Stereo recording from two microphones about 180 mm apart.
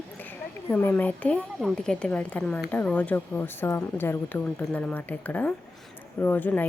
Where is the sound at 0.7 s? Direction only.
10° left (ahead or behind).